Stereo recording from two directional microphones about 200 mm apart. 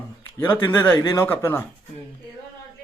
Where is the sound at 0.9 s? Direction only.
20° left (ahead or behind).